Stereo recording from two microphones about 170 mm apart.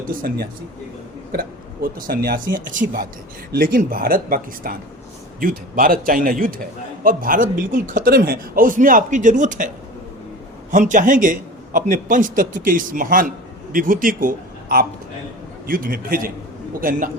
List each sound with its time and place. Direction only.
0.1 s a man's voice: 55° right (ahead or behind)
10.7 s a man's voice: 50° right (ahead or behind)